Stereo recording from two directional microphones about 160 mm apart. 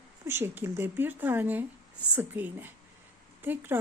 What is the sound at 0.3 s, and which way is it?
A woman's voice, 15° right (ahead or behind).